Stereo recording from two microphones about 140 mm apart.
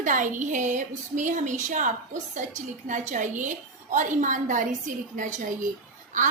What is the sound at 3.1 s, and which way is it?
A woman's voice, 65° right (ahead or behind).